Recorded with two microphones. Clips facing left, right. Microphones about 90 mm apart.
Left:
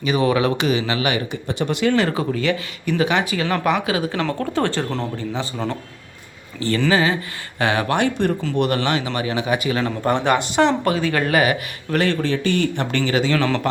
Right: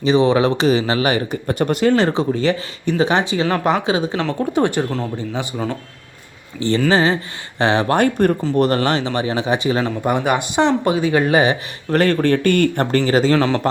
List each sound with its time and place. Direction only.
0.0 s speech: 30° right (ahead or behind)
1.5 s speech: 45° right (ahead or behind); by 5.5 s 15° right (ahead or behind)
6.6 s speech: 25° right (ahead or behind)
7.9 s speech: 45° right (ahead or behind); by 9.8 s 30° right (ahead or behind)
9.8 s speech: 10° right (ahead or behind); by 11.9 s 25° right (ahead or behind)
11.9 s a man's voice: 45° right (ahead or behind)
13.1 s speech: 40° right (ahead or behind)
13.4 s speech: 25° right (ahead or behind)